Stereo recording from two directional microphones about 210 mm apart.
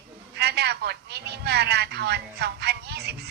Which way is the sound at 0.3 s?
50° right (ahead or behind).